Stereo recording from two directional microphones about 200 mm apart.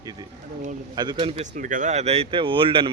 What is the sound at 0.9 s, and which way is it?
Speech, 20° right (ahead or behind).